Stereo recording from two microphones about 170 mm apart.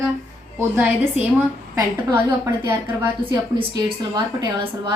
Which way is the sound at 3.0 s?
25° right (ahead or behind).